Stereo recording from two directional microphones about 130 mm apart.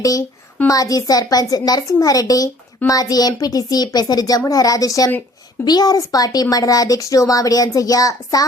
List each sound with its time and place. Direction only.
0.0 s a woman's voice: 25° left (ahead or behind)